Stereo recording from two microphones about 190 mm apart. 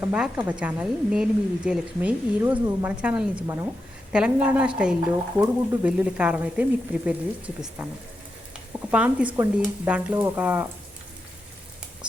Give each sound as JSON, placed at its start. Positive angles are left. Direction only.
{"t": 0.0, "sound": "a woman's voice", "side_deg": -10}
{"t": 8.9, "sound": "a woman's voice", "side_deg": -5}